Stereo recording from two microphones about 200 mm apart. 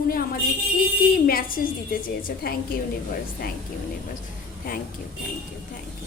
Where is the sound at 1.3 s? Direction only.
45° left (ahead or behind).